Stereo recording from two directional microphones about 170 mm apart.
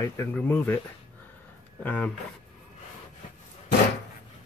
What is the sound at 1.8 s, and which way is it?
Speech, 10° left (ahead or behind).